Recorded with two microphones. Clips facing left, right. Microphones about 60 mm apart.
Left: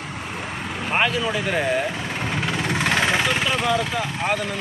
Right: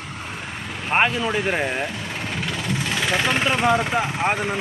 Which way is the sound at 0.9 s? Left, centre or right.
Right.